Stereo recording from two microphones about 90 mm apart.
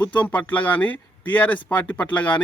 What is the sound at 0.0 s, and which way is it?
Speech, 20° left (ahead or behind).